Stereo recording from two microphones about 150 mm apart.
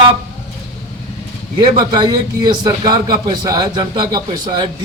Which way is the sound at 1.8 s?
25° right (ahead or behind).